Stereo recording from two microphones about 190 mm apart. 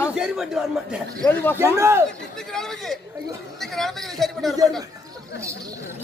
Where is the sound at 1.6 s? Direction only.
15° right (ahead or behind).